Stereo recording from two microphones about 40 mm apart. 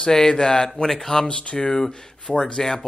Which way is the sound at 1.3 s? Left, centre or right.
Left.